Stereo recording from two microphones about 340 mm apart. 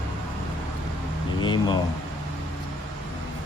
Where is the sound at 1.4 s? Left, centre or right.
Centre.